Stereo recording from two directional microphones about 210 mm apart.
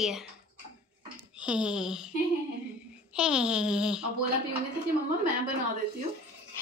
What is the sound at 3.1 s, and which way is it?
Speech, 5° right (ahead or behind).